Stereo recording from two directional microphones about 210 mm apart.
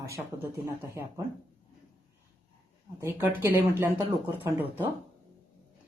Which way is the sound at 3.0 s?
10° right (ahead or behind).